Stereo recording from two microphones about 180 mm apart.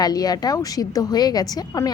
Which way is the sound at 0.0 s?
20° left (ahead or behind).